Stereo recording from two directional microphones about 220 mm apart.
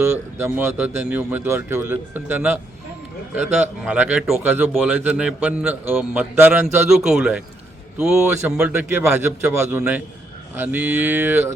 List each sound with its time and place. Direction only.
0.0 s speech: 10° right (ahead or behind)